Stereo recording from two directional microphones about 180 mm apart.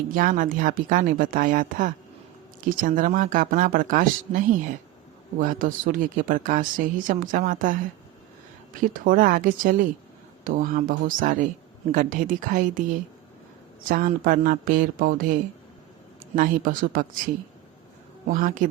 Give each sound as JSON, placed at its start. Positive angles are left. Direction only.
{"t": 0.1, "sound": "speech", "side_deg": -50}
{"t": 13.8, "sound": "speech", "side_deg": -50}
{"t": 16.3, "sound": "speech", "side_deg": -50}
{"t": 18.3, "sound": "speech", "side_deg": -50}